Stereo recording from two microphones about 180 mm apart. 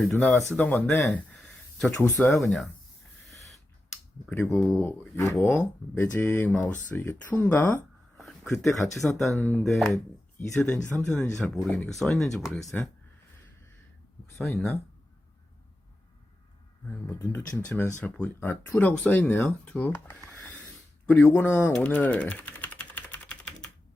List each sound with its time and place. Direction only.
0.0 s speech: 5° left (ahead or behind)
3.3 s a sound: centre (ahead or behind)
4.3 s speech: 10° left (ahead or behind)
14.3 s speech: centre (ahead or behind)
17.1 s speech: 10° left (ahead or behind)